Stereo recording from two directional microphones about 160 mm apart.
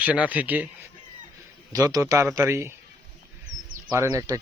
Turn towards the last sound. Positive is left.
turn(degrees=-20)  # may be behind; listen again after turning